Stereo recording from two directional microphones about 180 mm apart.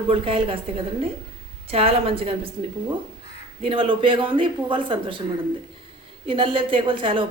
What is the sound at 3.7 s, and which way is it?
A woman's voice, 30° right (ahead or behind).